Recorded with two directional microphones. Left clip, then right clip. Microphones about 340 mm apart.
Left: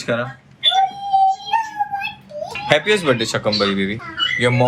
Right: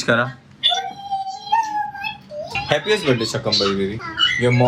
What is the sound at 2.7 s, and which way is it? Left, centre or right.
Speech, centre.